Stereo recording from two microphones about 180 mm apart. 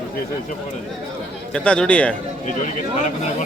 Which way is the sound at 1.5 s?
5° left (ahead or behind).